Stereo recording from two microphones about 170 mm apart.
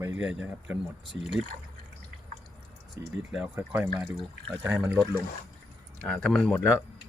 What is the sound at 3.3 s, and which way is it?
Speech, 10° right (ahead or behind).